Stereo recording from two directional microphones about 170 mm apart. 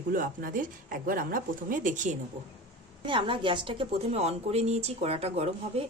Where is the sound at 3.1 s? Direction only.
30° right (ahead or behind).